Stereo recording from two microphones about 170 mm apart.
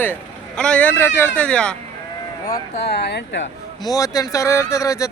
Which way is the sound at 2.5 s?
75° left (ahead or behind).